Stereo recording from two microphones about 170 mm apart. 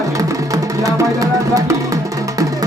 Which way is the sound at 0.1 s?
20° right (ahead or behind).